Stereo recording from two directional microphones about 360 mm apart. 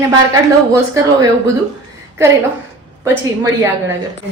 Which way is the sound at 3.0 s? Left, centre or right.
Centre.